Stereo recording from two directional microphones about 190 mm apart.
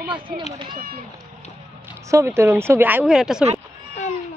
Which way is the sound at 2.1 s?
15° right (ahead or behind).